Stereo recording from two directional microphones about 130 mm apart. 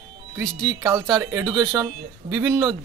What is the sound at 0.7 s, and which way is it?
A man's voice, 20° right (ahead or behind).